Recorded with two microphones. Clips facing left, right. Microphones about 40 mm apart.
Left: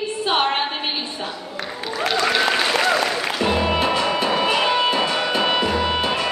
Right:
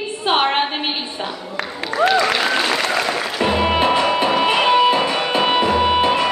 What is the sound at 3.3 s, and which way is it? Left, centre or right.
Music, right.